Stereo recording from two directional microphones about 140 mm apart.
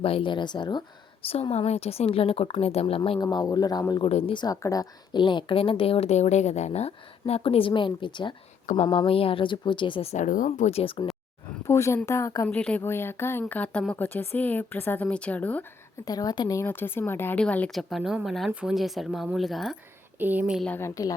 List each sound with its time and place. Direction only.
0.0 s speech: 40° left (ahead or behind)
3.2 s speech: 25° left (ahead or behind)
4.0 s a woman's voice: 40° left (ahead or behind)
4.4 s a woman's voice: 25° left (ahead or behind); by 10.2 s 45° left (ahead or behind)
10.2 s speech: 70° left (ahead or behind)
10.7 s speech: 45° left (ahead or behind)
11.7 s speech: 20° left (ahead or behind)
12.5 s speech: 10° left (ahead or behind)
16.0 s speech: 25° left (ahead or behind); by 19.7 s centre (ahead or behind)
20.1 s speech: 10° right (ahead or behind)
20.7 s speech: 15° left (ahead or behind)